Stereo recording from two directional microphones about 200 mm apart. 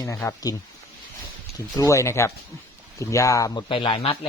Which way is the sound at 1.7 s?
15° left (ahead or behind).